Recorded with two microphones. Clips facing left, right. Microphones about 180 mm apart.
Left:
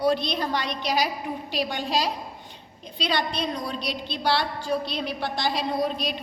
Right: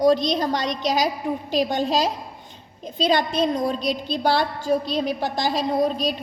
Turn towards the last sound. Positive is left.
turn(degrees=-40)  # may be behind; listen again after turning